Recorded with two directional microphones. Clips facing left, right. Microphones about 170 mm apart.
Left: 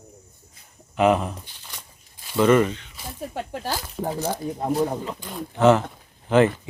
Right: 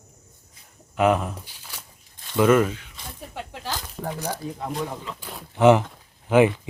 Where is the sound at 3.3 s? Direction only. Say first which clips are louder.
Left 3 dB; 45° left (ahead or behind).